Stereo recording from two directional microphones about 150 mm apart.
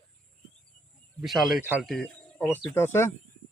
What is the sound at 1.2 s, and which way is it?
Speech, centre (ahead or behind).